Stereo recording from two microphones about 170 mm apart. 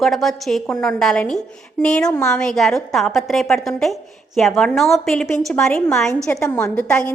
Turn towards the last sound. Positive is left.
turn(degrees=5)  # may be behind; listen again after turning